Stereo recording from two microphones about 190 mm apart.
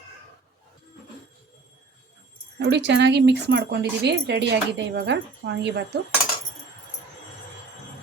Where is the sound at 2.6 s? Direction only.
65° right (ahead or behind).